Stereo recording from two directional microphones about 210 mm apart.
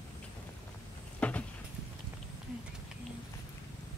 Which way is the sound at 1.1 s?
5° left (ahead or behind).